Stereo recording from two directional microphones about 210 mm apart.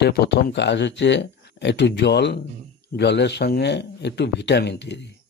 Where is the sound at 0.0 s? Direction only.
55° left (ahead or behind).